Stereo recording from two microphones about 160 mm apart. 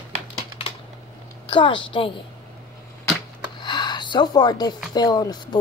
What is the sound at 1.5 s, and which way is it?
Speech, 30° left (ahead or behind).